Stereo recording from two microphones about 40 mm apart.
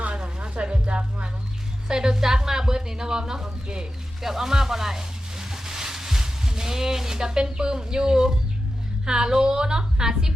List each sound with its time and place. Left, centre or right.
0.0 s music: right
1.9 s a woman's voice: centre